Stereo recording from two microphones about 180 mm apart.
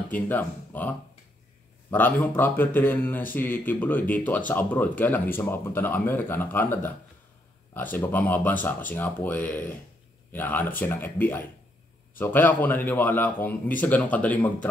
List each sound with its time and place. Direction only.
0.1 s speech: 10° left (ahead or behind)